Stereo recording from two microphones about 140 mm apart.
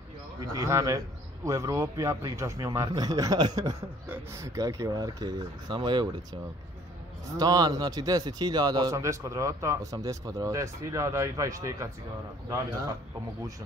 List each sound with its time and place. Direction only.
0.4 s speech: 25° right (ahead or behind)
4.1 s speech: 20° right (ahead or behind)
7.3 s speech: 25° right (ahead or behind)